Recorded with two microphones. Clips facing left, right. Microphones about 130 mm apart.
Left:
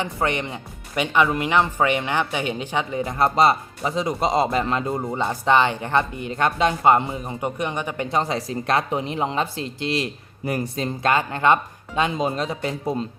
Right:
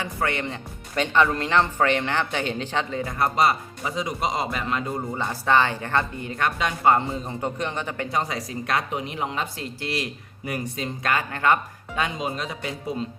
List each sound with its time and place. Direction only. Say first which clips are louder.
0.0 s speech: left 3 dB; 20° left (ahead or behind)
8.1 s speech: left 5 dB; 30° left (ahead or behind)